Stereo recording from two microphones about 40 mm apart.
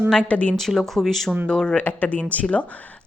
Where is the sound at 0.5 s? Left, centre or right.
Centre.